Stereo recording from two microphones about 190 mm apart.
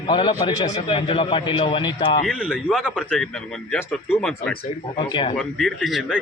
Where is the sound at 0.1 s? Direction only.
25° left (ahead or behind).